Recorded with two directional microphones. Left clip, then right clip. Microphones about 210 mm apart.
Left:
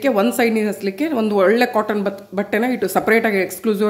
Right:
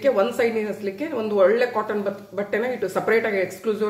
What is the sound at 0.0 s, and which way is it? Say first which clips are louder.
Speech: left 3 dB; 50° left (ahead or behind).